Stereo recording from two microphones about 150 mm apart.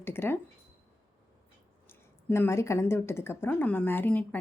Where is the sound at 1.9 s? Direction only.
15° left (ahead or behind).